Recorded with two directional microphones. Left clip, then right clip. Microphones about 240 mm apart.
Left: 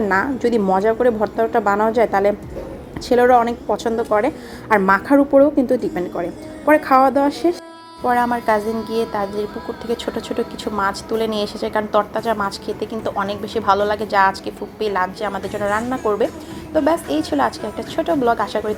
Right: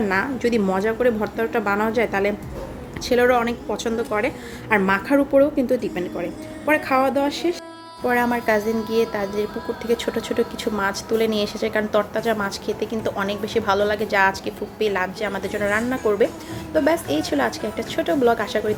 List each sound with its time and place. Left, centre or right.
0.1 s a woman's voice: centre